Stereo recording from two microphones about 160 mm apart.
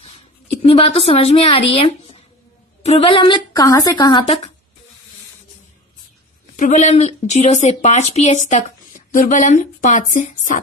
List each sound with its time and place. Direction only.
0.6 s a woman's voice: 35° left (ahead or behind)
6.5 s a woman's voice: 55° left (ahead or behind)